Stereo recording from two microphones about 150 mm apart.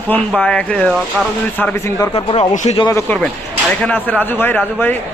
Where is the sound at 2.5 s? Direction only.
55° left (ahead or behind).